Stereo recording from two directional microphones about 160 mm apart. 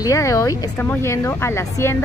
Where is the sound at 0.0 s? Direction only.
20° left (ahead or behind).